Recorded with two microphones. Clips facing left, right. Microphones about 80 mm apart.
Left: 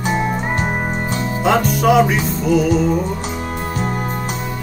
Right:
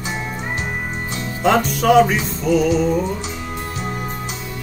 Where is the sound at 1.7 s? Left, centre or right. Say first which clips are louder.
Right 1 dB; centre.